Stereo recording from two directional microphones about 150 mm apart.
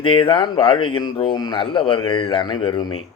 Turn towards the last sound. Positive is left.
turn(degrees=35)  # may be behind; listen again after turning